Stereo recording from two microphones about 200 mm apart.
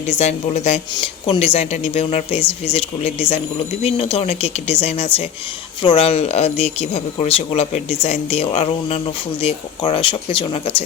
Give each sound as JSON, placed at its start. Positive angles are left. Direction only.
{"t": 0.1, "sound": "speech", "side_deg": 35}